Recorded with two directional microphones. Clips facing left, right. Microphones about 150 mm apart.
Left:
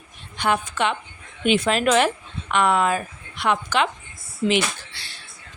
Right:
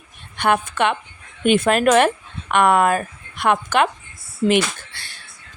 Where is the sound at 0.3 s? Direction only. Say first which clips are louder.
Right 4 dB; 55° right (ahead or behind).